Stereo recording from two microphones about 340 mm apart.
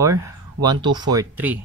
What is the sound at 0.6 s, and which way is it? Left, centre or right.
Speech, centre.